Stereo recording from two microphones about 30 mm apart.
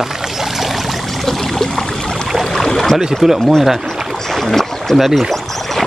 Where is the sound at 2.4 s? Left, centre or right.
Centre.